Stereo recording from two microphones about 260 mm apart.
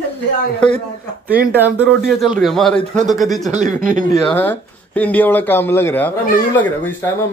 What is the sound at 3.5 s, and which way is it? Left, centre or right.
Speech, right.